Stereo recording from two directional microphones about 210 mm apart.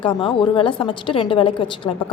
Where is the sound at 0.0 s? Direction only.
25° left (ahead or behind).